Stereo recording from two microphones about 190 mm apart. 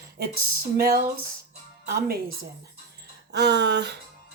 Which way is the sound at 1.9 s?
55° right (ahead or behind).